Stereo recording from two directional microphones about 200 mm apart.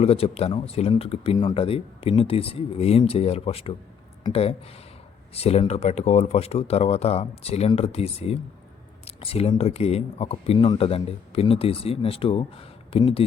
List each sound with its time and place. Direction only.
0.0 s speech: 30° left (ahead or behind)